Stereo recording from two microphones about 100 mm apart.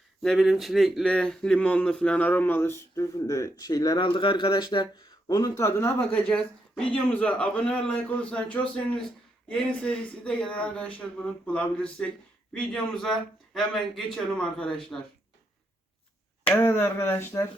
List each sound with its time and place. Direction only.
0.2 s speech: centre (ahead or behind)
1.0 s a man's voice: 10° left (ahead or behind); by 3.9 s 35° left (ahead or behind)
3.9 s speech: 60° left (ahead or behind)
5.3 s speech: 35° left (ahead or behind)
6.1 s a man's voice: 10° left (ahead or behind)
16.5 s speech: 20° left (ahead or behind)